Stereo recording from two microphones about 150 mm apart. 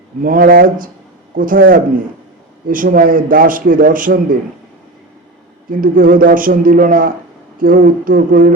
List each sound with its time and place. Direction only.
0.2 s a man's voice: 70° right (ahead or behind)
5.8 s a man's voice: 70° right (ahead or behind)